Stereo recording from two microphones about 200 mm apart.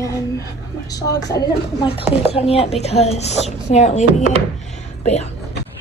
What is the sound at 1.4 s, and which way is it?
A woman's voice, 30° left (ahead or behind).